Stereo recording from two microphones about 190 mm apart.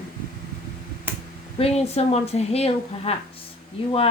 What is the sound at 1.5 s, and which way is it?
A woman's voice, 35° left (ahead or behind).